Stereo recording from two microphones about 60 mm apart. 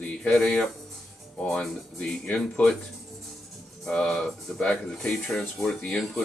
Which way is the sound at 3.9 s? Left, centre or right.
Centre.